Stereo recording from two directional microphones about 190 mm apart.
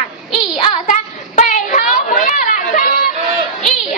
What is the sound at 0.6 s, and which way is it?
Child singing, 40° left (ahead or behind).